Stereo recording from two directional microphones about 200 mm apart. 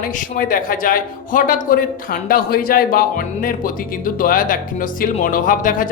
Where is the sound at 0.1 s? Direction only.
40° left (ahead or behind).